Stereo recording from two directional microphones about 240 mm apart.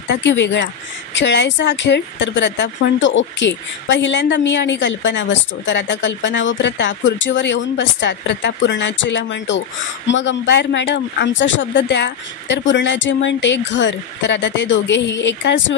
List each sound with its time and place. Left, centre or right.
0.1 s speech: left